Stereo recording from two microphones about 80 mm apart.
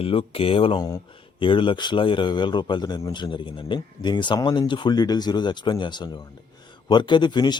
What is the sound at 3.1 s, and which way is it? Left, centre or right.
A man's voice, left.